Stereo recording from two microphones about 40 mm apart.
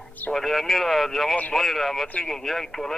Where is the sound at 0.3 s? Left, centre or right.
Centre.